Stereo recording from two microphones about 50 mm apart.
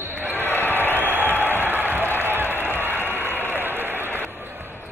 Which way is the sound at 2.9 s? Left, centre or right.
Left.